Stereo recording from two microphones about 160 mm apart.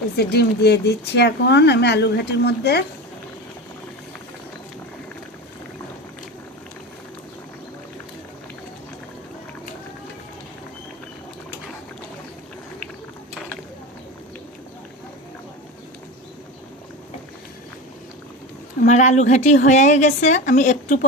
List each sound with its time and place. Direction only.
0.2 s speech: 85° left
18.9 s a woman's voice: 50° left (ahead or behind)